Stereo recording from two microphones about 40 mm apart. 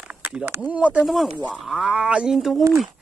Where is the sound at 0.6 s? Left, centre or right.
Right.